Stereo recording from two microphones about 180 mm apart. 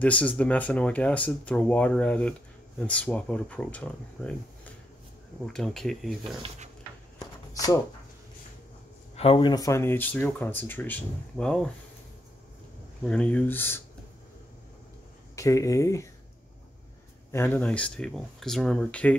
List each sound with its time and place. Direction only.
0.0 s speech: 5° left (ahead or behind)
7.5 s speech: 20° left (ahead or behind)
9.1 s speech: 35° left (ahead or behind); by 11.7 s 5° left (ahead or behind)
13.0 s speech: 5° left (ahead or behind)
15.3 s speech: 15° left (ahead or behind)
17.3 s speech: 10° left (ahead or behind)